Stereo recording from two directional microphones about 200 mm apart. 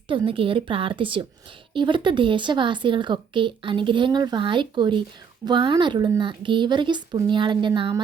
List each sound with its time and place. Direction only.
0.1 s speech: 25° right (ahead or behind)